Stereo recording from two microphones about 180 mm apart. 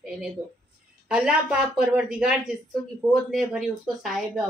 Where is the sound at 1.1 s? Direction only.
5° right (ahead or behind).